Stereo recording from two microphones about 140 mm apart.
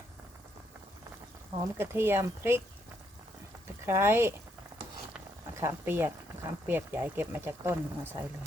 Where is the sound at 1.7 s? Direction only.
15° right (ahead or behind).